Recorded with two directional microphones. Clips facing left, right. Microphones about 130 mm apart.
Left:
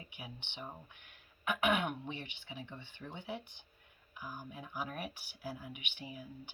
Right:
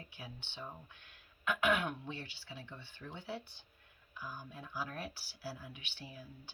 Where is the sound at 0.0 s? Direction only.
20° left (ahead or behind).